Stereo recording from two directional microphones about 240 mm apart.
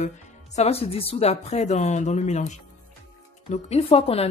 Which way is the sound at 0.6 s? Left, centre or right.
Left.